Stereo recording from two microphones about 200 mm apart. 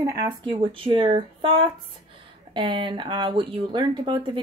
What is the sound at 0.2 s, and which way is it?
Speech, 20° right (ahead or behind).